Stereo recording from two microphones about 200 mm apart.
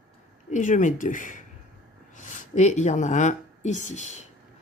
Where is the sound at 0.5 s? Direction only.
40° left (ahead or behind).